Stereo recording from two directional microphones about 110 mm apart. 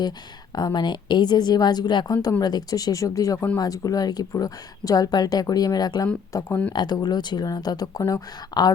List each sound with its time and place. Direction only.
0.5 s a woman's voice: 40° left (ahead or behind)